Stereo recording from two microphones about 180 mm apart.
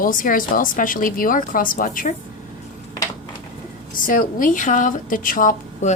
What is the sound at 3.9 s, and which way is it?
Speech, 50° left (ahead or behind).